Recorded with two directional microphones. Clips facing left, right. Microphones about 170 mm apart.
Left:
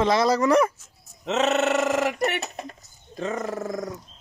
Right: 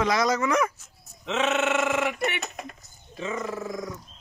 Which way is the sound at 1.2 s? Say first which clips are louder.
Left 3 dB; 40° left (ahead or behind).